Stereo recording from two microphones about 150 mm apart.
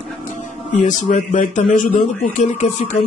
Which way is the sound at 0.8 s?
55° left (ahead or behind).